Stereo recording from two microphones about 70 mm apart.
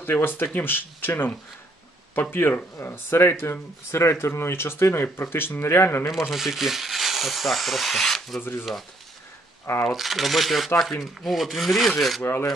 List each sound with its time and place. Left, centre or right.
0.0 s speech: left
6.3 s rub: centre
8.4 s speech: left
9.9 s rub: centre
12.2 s speech: left